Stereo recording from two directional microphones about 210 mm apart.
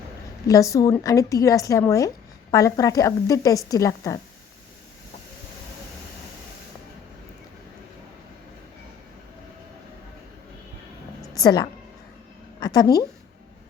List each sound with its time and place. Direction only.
0.4 s a woman's voice: 15° left (ahead or behind)
11.3 s a woman's voice: 20° left (ahead or behind)